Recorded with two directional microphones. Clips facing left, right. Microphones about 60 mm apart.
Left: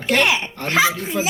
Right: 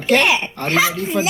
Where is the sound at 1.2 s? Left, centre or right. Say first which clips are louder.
Right 4 dB; centre.